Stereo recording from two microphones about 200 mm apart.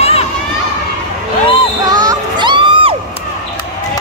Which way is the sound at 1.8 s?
20° right (ahead or behind).